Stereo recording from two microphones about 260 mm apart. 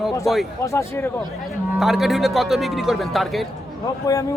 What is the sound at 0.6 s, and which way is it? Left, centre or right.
Speech, centre.